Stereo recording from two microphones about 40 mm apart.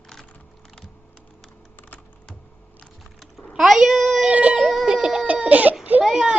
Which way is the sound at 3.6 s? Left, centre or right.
Centre.